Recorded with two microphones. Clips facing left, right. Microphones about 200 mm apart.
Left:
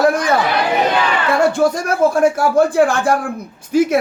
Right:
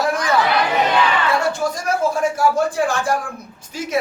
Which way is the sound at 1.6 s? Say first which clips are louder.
Left 6 dB; 60° left (ahead or behind).